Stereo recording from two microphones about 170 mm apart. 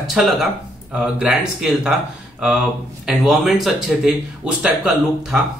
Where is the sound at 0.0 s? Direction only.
Centre (ahead or behind).